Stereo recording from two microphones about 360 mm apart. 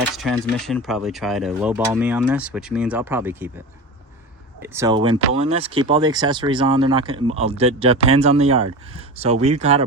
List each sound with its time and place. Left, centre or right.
0.2 s speech: centre
4.6 s speech: centre